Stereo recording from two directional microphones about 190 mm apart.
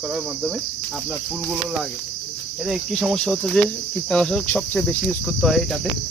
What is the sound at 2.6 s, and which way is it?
Speech, centre (ahead or behind).